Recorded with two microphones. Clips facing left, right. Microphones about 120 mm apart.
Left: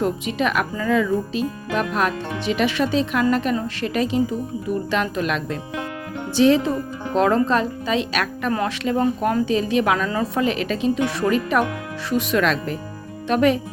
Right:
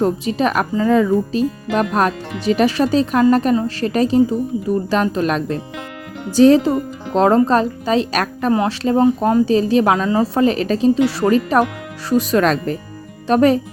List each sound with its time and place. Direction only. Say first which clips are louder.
0.0 s speech: right 5 dB; 35° right (ahead or behind)